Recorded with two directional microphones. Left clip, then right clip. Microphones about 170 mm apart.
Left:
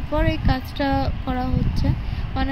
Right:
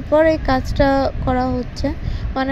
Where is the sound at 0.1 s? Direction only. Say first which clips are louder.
Right 10 dB; 10° right (ahead or behind).